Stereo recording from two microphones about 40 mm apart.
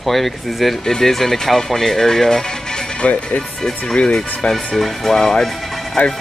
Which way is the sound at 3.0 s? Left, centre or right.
Left.